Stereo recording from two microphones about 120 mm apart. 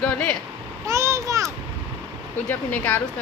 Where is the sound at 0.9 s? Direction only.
25° right (ahead or behind).